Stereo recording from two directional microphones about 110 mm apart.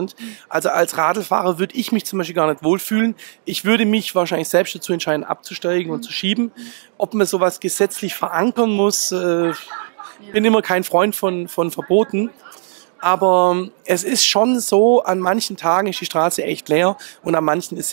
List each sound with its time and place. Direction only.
0.5 s speech: 25° right (ahead or behind)